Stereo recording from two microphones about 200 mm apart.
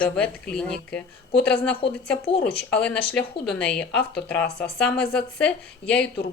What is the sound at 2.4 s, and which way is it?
Speech, 5° left (ahead or behind).